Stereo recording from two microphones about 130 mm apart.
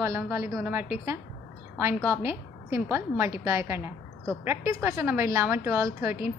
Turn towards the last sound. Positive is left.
turn(degrees=-20)  # may be behind; listen again after turning